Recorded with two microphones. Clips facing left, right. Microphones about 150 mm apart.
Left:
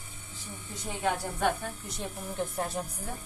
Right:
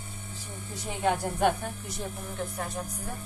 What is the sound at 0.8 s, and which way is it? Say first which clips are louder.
Speech: right 3 dB; 10° right (ahead or behind).